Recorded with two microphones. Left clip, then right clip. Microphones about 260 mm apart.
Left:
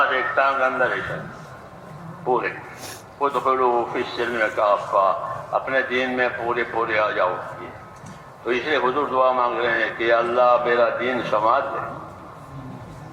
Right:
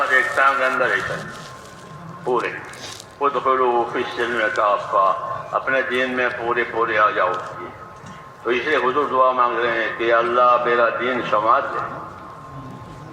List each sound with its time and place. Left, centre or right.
0.1 s speech: centre
2.2 s a man's voice: left
8.4 s a man's voice: left